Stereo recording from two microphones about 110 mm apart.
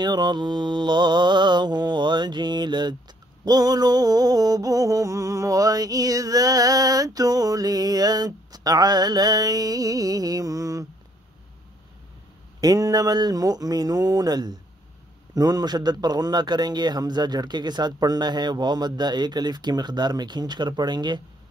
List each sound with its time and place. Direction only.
0.0 s mantra: 40° right (ahead or behind)
3.4 s music: 35° right (ahead or behind)
12.5 s music: 35° right (ahead or behind)